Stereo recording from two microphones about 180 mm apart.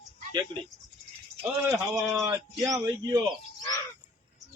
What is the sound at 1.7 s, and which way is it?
Speech, centre (ahead or behind).